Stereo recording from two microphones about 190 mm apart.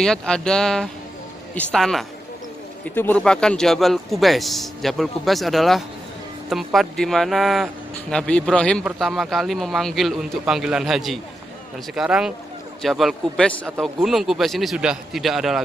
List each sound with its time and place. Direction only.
0.0 s speech: 5° left (ahead or behind)